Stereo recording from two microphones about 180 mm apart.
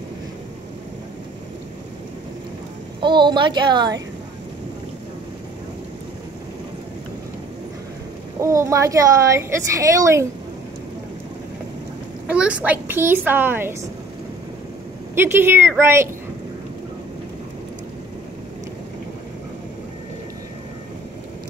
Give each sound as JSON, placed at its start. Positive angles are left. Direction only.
{"t": 3.0, "sound": "a woman's voice", "side_deg": -25}
{"t": 8.4, "sound": "a woman's voice", "side_deg": -15}
{"t": 12.3, "sound": "a woman's voice", "side_deg": -5}
{"t": 15.1, "sound": "a woman's voice", "side_deg": -10}